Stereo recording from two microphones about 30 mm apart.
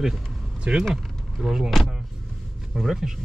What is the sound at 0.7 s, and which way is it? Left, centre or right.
Speech, right.